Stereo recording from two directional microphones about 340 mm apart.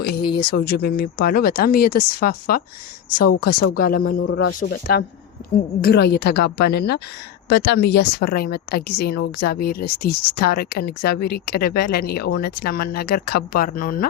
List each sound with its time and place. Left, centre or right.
0.2 s speech: centre
0.4 s speech: left